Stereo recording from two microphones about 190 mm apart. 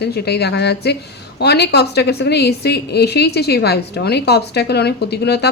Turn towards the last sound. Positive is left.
turn(degrees=60)  # may be behind; listen again after turning